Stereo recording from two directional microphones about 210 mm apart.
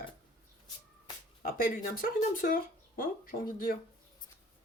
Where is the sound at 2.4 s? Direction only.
40° left (ahead or behind).